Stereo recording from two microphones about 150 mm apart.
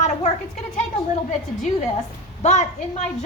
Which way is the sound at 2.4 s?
50° left (ahead or behind).